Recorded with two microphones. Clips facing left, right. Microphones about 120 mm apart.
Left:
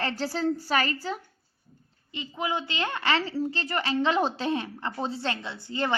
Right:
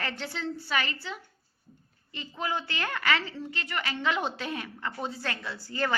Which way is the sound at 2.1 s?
20° left (ahead or behind).